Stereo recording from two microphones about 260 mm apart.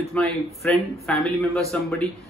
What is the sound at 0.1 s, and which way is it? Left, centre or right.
A man's voice, centre.